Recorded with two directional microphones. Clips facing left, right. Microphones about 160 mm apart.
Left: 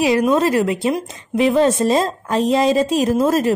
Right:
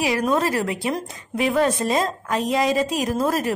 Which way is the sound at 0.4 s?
20° left (ahead or behind).